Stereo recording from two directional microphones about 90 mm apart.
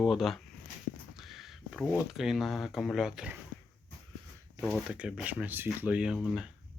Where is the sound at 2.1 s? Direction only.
5° right (ahead or behind).